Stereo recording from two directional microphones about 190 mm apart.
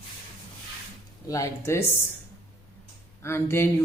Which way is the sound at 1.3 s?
15° left (ahead or behind).